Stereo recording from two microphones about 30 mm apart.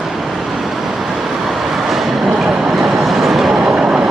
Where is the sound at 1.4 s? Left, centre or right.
Centre.